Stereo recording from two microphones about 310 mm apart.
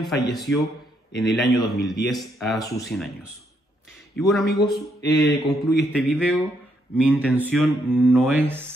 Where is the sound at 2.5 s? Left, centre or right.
Centre.